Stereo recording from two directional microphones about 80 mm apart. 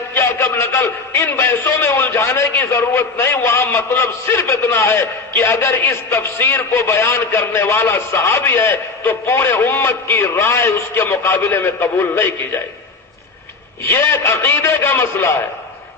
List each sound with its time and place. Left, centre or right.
0.1 s a sound: left
2.7 s a man's voice: left
13.8 s a man's voice: left